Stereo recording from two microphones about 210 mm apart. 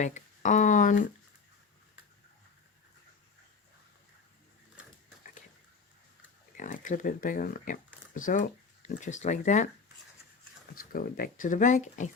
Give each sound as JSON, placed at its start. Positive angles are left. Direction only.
{"t": 0.0, "sound": "speech", "side_deg": 35}
{"t": 6.6, "sound": "speech", "side_deg": 40}
{"t": 10.9, "sound": "speech", "side_deg": 40}